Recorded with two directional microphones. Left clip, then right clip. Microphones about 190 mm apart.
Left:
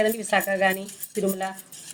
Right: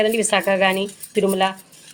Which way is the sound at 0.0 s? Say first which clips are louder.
Right 5 dB; 45° right (ahead or behind).